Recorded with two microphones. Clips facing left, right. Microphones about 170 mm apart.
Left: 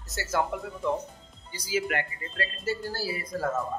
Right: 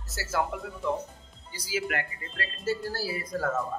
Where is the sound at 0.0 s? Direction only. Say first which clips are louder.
Left 2 dB; 5° right (ahead or behind).